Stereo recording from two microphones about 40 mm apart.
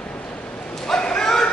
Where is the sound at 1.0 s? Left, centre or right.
Centre.